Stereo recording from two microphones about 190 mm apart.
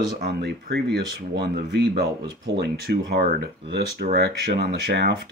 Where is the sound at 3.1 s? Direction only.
60° right (ahead or behind).